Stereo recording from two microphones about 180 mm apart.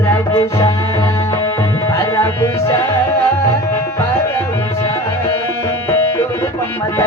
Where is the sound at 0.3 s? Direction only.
20° left (ahead or behind).